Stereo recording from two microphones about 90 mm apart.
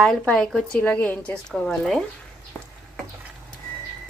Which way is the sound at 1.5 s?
Centre (ahead or behind).